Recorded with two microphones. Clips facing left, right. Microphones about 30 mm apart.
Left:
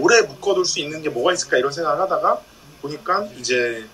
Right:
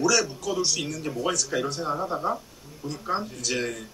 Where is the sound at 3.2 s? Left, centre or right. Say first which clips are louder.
Left 8 dB; left.